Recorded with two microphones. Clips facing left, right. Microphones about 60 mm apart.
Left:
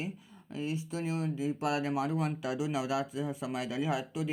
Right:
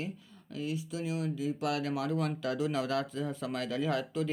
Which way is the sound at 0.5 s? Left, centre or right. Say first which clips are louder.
Left 1 dB; left.